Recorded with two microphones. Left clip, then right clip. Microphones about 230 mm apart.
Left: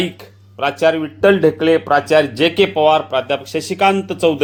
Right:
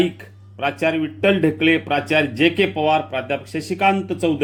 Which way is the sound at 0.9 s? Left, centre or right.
Left.